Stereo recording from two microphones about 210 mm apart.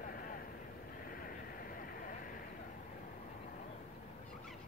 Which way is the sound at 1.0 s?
40° left (ahead or behind).